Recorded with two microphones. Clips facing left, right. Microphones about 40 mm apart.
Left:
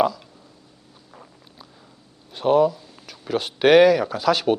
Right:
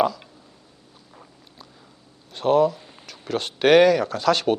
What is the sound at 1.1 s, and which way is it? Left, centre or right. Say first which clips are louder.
Vehicle: left 2 dB; centre.